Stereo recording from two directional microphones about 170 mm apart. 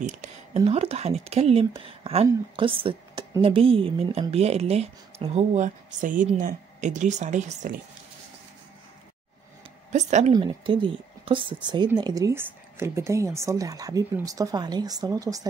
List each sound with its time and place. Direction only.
0.7 s a woman's voice: 35° right (ahead or behind)
9.9 s a woman's voice: 40° right (ahead or behind)
10.3 s speech: 30° right (ahead or behind)